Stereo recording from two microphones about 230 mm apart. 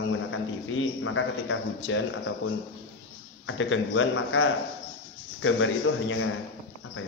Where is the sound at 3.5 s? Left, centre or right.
Left.